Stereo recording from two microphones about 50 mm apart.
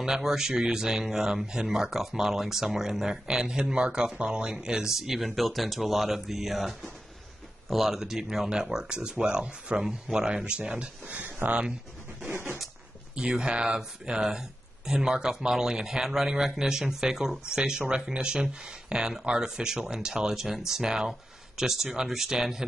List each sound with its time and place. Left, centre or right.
0.0 s speech: centre
11.2 s speech: right
13.1 s speech: centre